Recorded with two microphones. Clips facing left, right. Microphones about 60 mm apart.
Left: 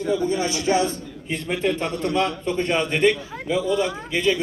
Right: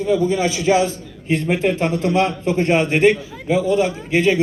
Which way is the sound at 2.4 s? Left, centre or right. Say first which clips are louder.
Right 5 dB; right.